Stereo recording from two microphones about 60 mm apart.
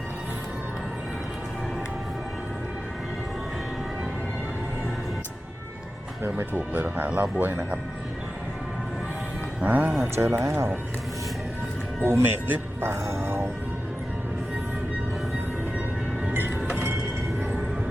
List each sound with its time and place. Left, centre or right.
6.3 s speech: right
9.6 s speech: right
10.0 s speech: right
12.0 s speech: right
16.6 s a sound: right